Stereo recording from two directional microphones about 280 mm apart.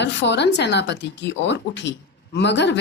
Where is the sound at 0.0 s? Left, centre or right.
Left.